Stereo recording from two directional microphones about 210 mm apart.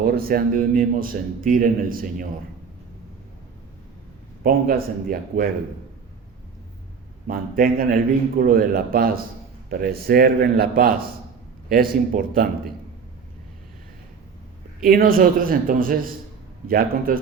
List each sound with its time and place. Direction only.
0.0 s a man's voice: 45° right (ahead or behind)
4.4 s a man's voice: 45° right (ahead or behind)
7.3 s a man's voice: 45° right (ahead or behind)
14.8 s a man's voice: 45° right (ahead or behind)